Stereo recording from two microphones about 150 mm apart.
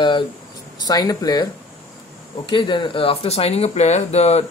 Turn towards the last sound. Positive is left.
turn(degrees=45)  # may be behind; listen again after turning